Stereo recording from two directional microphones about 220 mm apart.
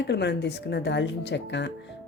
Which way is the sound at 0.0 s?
50° left (ahead or behind).